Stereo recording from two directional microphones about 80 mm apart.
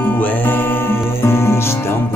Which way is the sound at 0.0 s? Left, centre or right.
Left.